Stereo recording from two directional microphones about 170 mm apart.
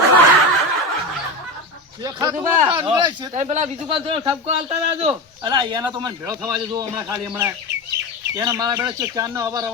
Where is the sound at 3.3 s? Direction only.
45° right (ahead or behind).